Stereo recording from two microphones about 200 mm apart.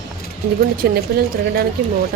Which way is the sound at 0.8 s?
50° right (ahead or behind).